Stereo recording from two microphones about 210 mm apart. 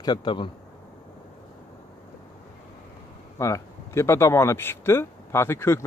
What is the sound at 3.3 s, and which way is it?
Speech, 15° left (ahead or behind).